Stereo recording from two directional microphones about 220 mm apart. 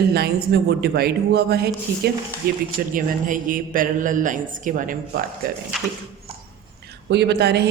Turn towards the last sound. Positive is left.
turn(degrees=-50)  # may be behind; listen again after turning